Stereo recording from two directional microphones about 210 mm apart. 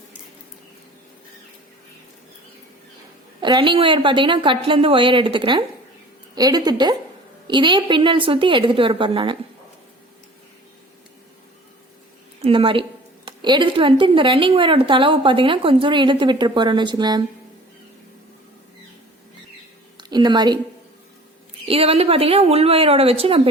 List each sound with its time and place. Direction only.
3.4 s a woman's voice: 20° right (ahead or behind)
12.4 s a woman's voice: 25° right (ahead or behind)
20.0 s speech: 20° right (ahead or behind)
21.7 s a woman's voice: 25° right (ahead or behind)